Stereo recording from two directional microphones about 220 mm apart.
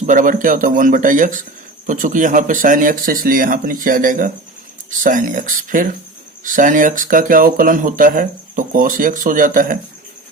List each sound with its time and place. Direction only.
0.0 s speech: 35° right (ahead or behind)